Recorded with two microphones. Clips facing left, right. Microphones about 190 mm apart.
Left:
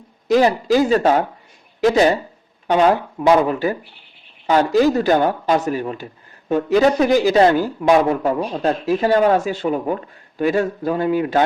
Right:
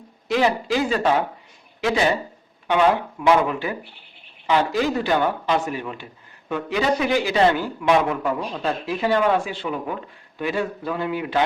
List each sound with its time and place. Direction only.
0.3 s speech: 40° left (ahead or behind)
2.6 s speech: 40° left (ahead or behind)